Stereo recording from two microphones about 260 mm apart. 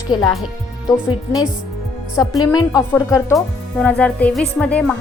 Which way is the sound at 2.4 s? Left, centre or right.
Centre.